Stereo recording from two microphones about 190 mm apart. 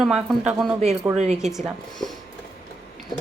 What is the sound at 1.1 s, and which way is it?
Dishes, 35° right (ahead or behind).